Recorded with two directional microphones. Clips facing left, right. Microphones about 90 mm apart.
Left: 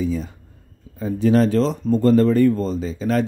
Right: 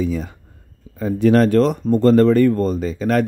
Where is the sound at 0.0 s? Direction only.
70° right (ahead or behind).